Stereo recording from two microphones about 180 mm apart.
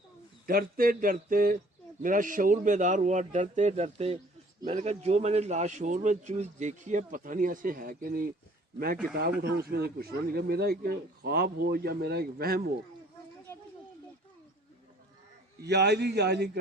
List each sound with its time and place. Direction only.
0.4 s a man's voice: 55° right (ahead or behind)
9.4 s speech: 60° right (ahead or behind)
15.6 s a man's voice: 65° right (ahead or behind)